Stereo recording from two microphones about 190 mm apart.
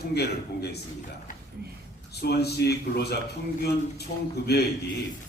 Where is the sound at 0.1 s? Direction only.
60° left (ahead or behind).